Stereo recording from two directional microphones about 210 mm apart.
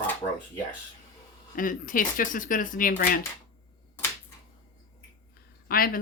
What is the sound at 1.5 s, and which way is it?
Speech, 40° left (ahead or behind).